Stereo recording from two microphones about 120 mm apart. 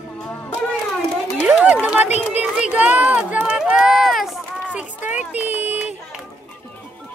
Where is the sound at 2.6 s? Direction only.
10° right (ahead or behind).